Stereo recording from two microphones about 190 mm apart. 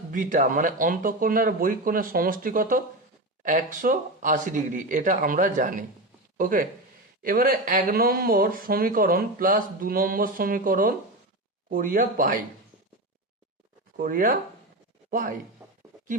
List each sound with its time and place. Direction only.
0.1 s speech: 45° right (ahead or behind)
13.9 s speech: 45° right (ahead or behind)